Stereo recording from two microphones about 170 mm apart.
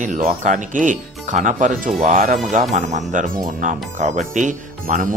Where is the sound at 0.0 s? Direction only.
45° right (ahead or behind).